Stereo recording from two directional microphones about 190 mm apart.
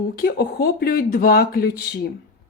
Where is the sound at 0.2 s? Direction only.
55° left (ahead or behind).